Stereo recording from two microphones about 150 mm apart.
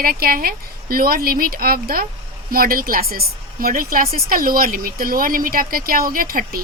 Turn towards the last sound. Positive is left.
turn(degrees=-75)  # may be behind; listen again after turning